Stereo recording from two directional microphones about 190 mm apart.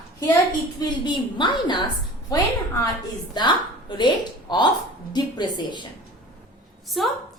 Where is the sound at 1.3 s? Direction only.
25° left (ahead or behind).